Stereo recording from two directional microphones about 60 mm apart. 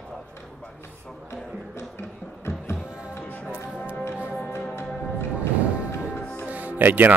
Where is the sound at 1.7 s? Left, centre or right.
Left.